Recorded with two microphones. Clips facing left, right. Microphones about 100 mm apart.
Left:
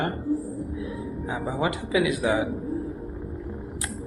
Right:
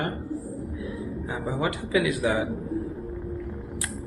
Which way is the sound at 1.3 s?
15° left (ahead or behind).